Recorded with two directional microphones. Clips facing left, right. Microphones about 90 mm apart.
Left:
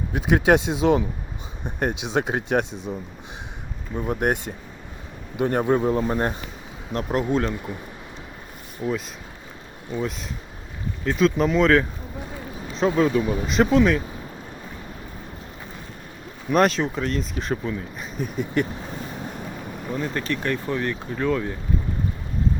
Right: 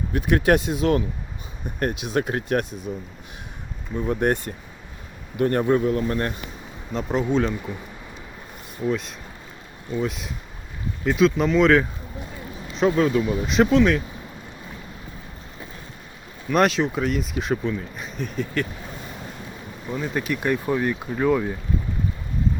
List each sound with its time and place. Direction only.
0.1 s speech: 20° left (ahead or behind)
3.9 s speech: 10° left (ahead or behind)
5.8 s speech: 30° left (ahead or behind)
6.9 s speech: 5° left (ahead or behind)
8.8 s speech: 5° left (ahead or behind)
16.5 s speech: centre (ahead or behind)
19.9 s speech: 5° right (ahead or behind)